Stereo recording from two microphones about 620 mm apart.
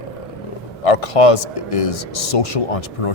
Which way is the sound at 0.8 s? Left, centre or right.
Left.